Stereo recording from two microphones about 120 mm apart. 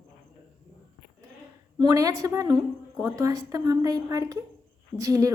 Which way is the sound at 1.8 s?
30° right (ahead or behind).